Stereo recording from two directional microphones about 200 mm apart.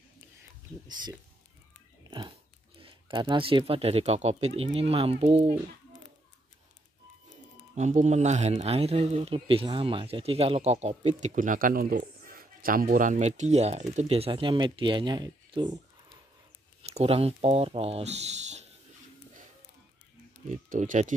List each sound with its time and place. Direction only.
2.0 s dog: 25° right (ahead or behind)
2.8 s speech: 25° right (ahead or behind)
7.7 s speech: 35° right (ahead or behind)
16.8 s speech: 30° right (ahead or behind)
20.4 s speech: 40° right (ahead or behind)